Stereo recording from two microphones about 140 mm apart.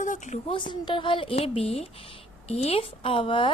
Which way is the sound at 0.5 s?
35° left (ahead or behind).